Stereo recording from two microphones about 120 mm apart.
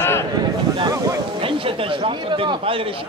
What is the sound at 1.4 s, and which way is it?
A man's voice, 50° right (ahead or behind).